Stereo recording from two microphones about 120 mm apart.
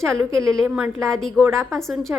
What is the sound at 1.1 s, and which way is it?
A woman's voice, 5° left (ahead or behind).